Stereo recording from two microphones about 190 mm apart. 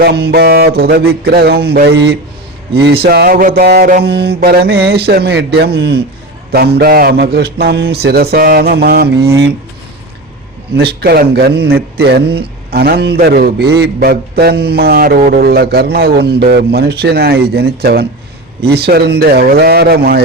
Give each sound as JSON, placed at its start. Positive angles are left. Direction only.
{"t": 0.0, "sound": "a man's voice", "side_deg": -55}
{"t": 10.8, "sound": "a man's voice", "side_deg": -55}